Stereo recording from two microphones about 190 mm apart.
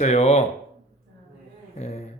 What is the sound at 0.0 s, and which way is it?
Speech, 35° left (ahead or behind).